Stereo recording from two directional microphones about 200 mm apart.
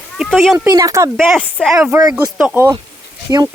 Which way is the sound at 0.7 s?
15° right (ahead or behind).